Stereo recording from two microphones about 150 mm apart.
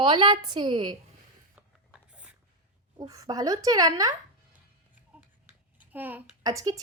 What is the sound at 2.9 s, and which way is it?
A woman's voice, 25° right (ahead or behind).